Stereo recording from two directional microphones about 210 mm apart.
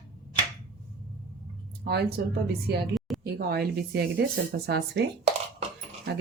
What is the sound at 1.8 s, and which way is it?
Speech, 50° right (ahead or behind).